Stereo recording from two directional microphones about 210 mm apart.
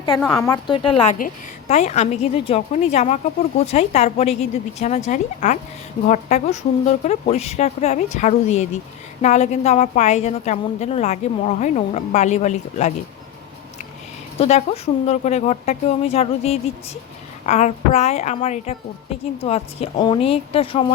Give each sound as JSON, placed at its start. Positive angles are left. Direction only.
{"t": 0.2, "sound": "a woman's voice", "side_deg": 10}
{"t": 14.3, "sound": "a woman's voice", "side_deg": 30}